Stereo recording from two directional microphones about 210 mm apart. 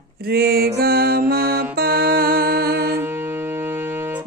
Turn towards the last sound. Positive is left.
turn(degrees=-10)  # may be behind; listen again after turning